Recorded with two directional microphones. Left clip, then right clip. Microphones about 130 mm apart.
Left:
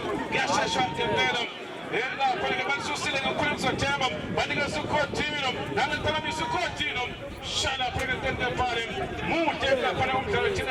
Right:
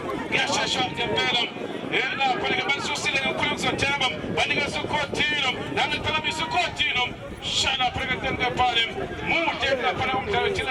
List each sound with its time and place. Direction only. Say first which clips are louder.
0.3 s speech: right 2 dB; 40° right (ahead or behind)